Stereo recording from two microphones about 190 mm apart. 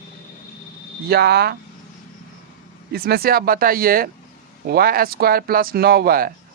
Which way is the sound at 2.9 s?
55° right (ahead or behind).